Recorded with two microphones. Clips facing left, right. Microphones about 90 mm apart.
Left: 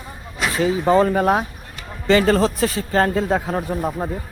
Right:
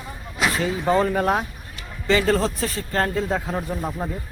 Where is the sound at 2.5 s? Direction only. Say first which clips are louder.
Left 6 dB; 85° left.